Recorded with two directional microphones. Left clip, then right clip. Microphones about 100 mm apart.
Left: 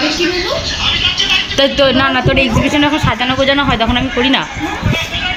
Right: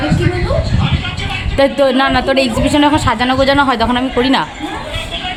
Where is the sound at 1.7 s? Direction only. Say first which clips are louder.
Left 1 dB; 20° right (ahead or behind).